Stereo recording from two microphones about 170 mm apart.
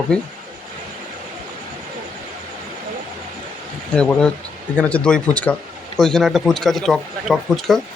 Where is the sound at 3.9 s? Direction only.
5° left (ahead or behind).